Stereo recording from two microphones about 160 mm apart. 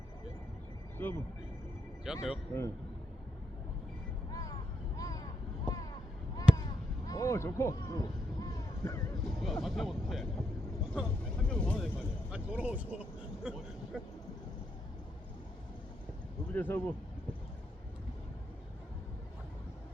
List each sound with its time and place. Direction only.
1.0 s speech: 15° left (ahead or behind)
2.1 s speech: 5° right (ahead or behind)
4.3 s vehicle: 20° left (ahead or behind)
6.5 s a sound: 5° right (ahead or behind)
7.1 s a sound: 20° left (ahead or behind)
9.2 s speech: centre (ahead or behind)
12.3 s speech: 10° right (ahead or behind)
16.5 s speech: 15° left (ahead or behind)